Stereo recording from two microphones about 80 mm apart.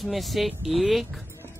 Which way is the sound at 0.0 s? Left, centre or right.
Centre.